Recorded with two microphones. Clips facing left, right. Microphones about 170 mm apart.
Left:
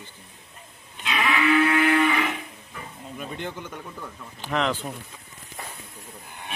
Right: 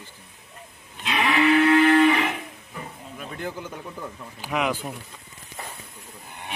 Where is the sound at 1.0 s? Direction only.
35° right (ahead or behind).